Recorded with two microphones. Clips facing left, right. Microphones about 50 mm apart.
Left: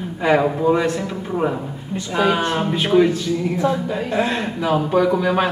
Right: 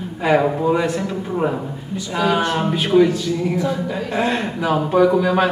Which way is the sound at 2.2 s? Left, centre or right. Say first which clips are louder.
Left 1 dB; left.